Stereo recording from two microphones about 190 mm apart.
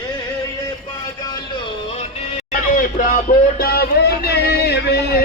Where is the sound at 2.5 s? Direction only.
45° left (ahead or behind).